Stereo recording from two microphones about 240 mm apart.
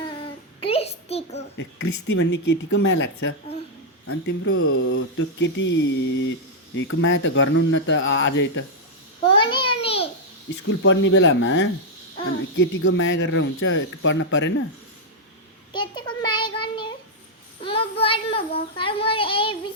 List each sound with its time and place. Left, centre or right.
0.2 s child singing: left
1.5 s speech: left
4.0 s speech: left
9.3 s a sound: left
10.5 s speech: left
15.7 s child singing: centre